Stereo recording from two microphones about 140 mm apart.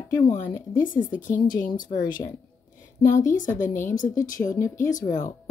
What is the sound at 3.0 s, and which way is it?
Speech, 65° left (ahead or behind).